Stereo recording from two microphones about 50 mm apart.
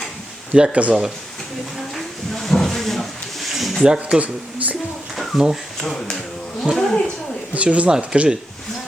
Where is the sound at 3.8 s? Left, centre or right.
Centre.